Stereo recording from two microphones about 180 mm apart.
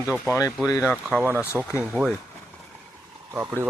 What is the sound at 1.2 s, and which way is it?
Speech, 10° right (ahead or behind).